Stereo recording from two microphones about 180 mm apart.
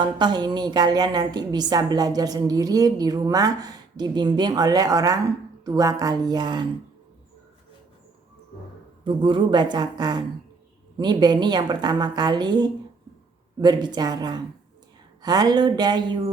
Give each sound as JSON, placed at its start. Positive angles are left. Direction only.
{"t": 0.0, "sound": "a woman's voice", "side_deg": -25}
{"t": 9.0, "sound": "a woman's voice", "side_deg": -25}